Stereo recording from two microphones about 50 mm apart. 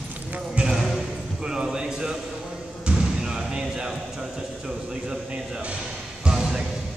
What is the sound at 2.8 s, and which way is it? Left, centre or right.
Slam, centre.